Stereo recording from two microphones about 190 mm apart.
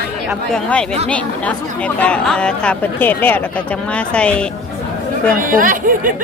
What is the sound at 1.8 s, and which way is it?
A woman's voice, 5° left (ahead or behind).